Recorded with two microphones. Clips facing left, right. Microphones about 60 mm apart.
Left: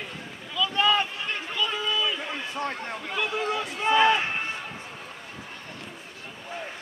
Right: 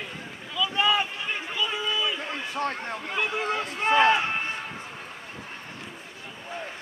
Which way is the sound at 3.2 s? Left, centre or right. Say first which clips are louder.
Even; centre.